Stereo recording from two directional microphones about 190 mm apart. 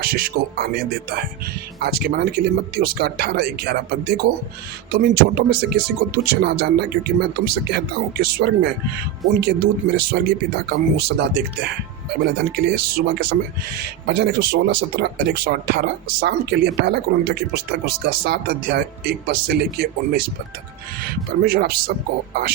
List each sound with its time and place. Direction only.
0.0 s speech: 50° right (ahead or behind)
1.8 s speech: 55° right (ahead or behind)
21.4 s speech: 55° right (ahead or behind)